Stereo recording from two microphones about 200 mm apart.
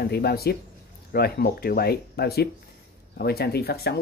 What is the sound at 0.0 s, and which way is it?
Speech, 55° left (ahead or behind).